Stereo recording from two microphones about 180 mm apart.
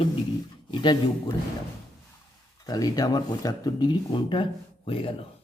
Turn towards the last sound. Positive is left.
turn(degrees=30)  # may be behind; listen again after turning